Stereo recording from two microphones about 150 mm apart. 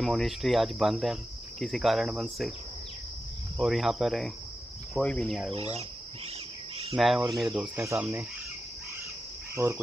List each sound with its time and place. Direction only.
0.0 s speech: centre (ahead or behind)
3.5 s speech: centre (ahead or behind)
5.5 s speech: 40° right (ahead or behind)
7.0 s speech: centre (ahead or behind)
7.7 s cricket: 15° right (ahead or behind)
9.6 s cricket: 20° right (ahead or behind)